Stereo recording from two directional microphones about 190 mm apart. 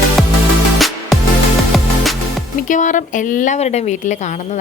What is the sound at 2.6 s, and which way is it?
A woman's voice, 40° left (ahead or behind).